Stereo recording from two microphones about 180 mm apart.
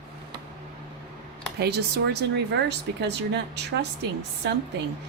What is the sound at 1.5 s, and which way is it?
Speech, 60° right (ahead or behind).